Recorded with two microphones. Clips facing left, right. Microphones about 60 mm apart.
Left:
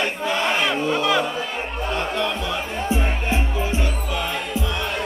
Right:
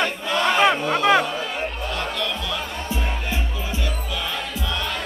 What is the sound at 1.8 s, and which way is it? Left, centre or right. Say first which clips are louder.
Music: left 7 dB; left.